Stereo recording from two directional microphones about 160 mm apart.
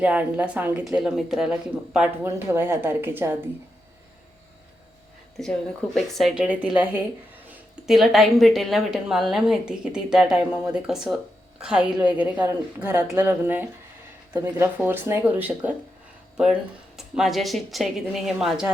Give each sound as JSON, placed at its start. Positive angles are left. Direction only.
{"t": 0.0, "sound": "a woman's voice", "side_deg": -10}
{"t": 5.4, "sound": "a woman's voice", "side_deg": 0}
{"t": 12.9, "sound": "speech", "side_deg": -25}
{"t": 13.2, "sound": "speech", "side_deg": -10}
{"t": 17.0, "sound": "a woman's voice", "side_deg": 0}